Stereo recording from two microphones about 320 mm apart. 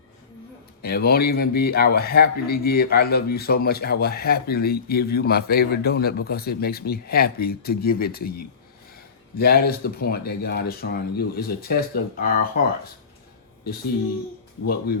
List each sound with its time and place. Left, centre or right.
0.8 s a man's voice: left